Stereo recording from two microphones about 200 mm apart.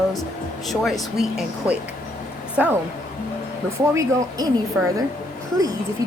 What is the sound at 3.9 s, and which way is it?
Speech, 15° right (ahead or behind).